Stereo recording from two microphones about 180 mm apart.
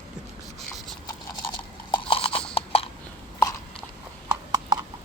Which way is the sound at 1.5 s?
25° left (ahead or behind).